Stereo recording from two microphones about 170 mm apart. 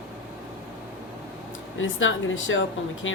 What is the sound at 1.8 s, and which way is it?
Speech, 90° left.